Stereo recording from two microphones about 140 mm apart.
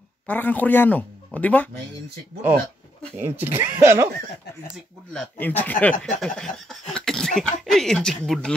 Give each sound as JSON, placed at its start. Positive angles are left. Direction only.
{"t": 0.3, "sound": "speech", "side_deg": 10}
{"t": 3.2, "sound": "speech", "side_deg": -15}
{"t": 5.1, "sound": "speech", "side_deg": 10}